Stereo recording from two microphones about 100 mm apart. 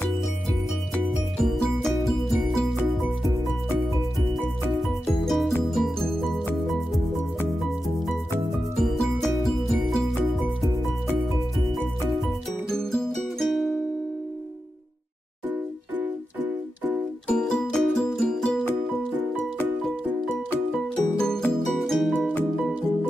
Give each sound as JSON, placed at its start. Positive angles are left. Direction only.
{"t": 1.4, "sound": "music", "side_deg": 0}
{"t": 4.8, "sound": "music", "side_deg": 0}
{"t": 8.7, "sound": "music", "side_deg": 0}
{"t": 12.7, "sound": "music", "side_deg": 5}
{"t": 16.0, "sound": "music", "side_deg": -15}
{"t": 17.3, "sound": "music", "side_deg": 5}
{"t": 20.7, "sound": "music", "side_deg": 5}